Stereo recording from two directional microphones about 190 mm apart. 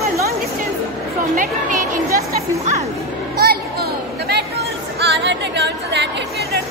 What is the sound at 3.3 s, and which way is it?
Music, 55° right (ahead or behind).